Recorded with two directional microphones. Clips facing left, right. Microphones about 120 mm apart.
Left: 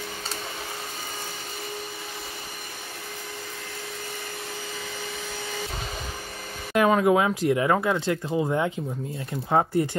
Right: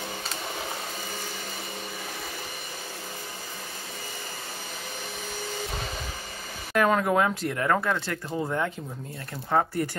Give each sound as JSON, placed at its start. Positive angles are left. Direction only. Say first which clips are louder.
{"t": 6.7, "sound": "speech", "louder": "left 3 dB", "side_deg": 10}